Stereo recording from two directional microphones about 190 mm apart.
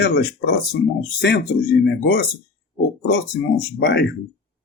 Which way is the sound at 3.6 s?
60° left (ahead or behind).